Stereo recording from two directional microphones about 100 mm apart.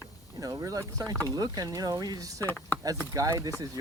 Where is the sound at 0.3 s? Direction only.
35° right (ahead or behind).